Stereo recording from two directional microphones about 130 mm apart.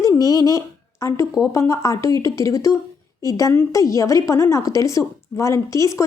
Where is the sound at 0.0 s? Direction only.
25° left (ahead or behind).